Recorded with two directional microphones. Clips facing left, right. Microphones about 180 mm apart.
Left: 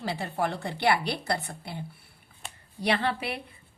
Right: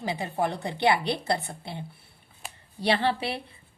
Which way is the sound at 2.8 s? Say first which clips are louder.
Right 2 dB; 30° right (ahead or behind).